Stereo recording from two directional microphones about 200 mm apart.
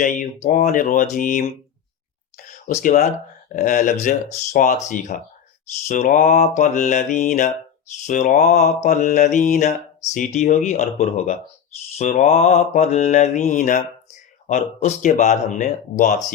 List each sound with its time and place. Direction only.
0.4 s mantra: 45° left (ahead or behind)
2.6 s mantra: 40° left (ahead or behind)